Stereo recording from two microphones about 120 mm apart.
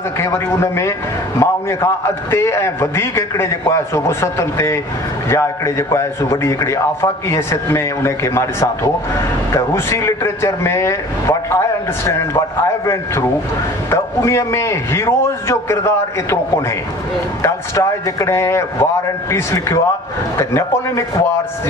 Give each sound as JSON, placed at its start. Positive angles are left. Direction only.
{"t": 0.2, "sound": "a man's voice", "side_deg": 20}
{"t": 17.4, "sound": "a man's voice", "side_deg": 25}